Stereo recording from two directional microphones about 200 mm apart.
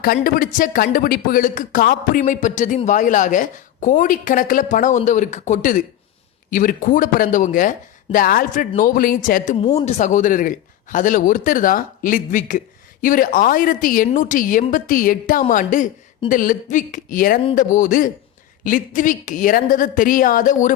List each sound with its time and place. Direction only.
0.0 s a man's voice: 45° left (ahead or behind)
9.6 s a man's voice: 30° left (ahead or behind)